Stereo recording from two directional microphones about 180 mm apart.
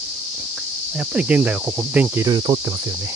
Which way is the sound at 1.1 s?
10° right (ahead or behind).